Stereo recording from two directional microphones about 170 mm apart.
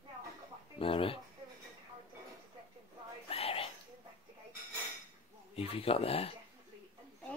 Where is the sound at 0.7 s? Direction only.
30° left (ahead or behind).